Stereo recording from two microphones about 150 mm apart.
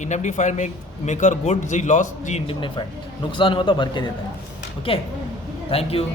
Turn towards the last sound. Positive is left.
turn(degrees=40)  # may be behind; listen again after turning